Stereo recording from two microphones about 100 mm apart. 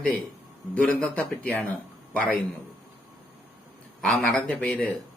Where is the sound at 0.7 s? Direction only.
15° left (ahead or behind).